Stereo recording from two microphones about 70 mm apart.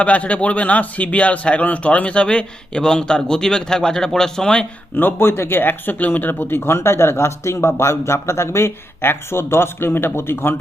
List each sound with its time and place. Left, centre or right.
0.0 s a man's voice: centre
4.9 s speech: left